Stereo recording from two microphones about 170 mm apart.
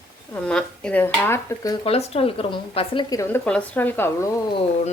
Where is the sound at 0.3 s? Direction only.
5° left (ahead or behind).